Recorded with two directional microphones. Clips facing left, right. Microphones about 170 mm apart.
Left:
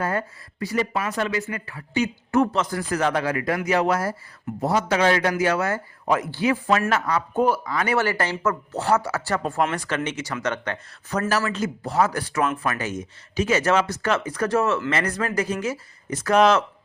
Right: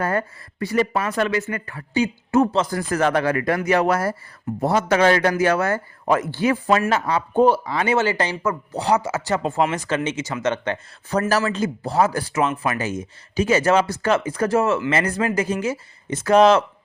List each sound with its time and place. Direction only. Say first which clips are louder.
0.0 s a man's voice: right 3 dB; 55° right (ahead or behind)
1.9 s a man's voice: right 3 dB; 30° right (ahead or behind); by 6.6 s 45° right (ahead or behind)
6.9 s speech: right 3 dB; 30° right (ahead or behind)
11.3 s speech: right 2 dB; 35° right (ahead or behind)